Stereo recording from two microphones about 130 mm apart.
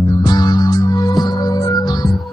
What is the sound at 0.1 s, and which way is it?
Music, 30° left (ahead or behind).